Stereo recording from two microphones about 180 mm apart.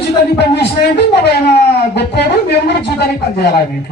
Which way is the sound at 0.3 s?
70° left (ahead or behind).